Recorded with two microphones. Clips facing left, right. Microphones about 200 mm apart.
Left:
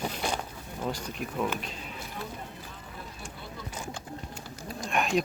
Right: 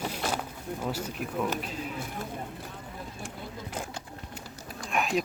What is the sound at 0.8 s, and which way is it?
Speech, 5° right (ahead or behind).